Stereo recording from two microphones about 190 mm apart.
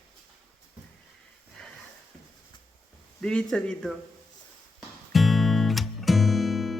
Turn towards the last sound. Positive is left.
turn(degrees=0)  # may be behind; listen again after turning